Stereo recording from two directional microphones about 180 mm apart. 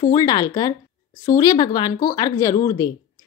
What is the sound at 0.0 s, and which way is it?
A woman's voice, 20° left (ahead or behind).